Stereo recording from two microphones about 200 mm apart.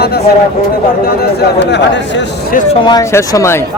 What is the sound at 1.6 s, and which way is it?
Speech, 60° left (ahead or behind).